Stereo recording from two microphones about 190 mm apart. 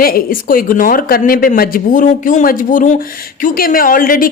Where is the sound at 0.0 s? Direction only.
50° left (ahead or behind).